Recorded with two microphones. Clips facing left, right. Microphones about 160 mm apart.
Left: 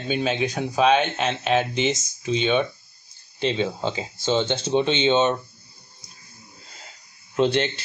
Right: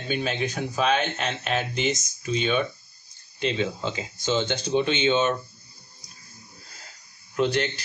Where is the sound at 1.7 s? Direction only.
30° left (ahead or behind).